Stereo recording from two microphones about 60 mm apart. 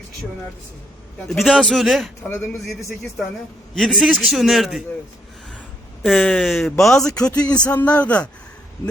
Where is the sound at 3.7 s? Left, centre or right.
Centre.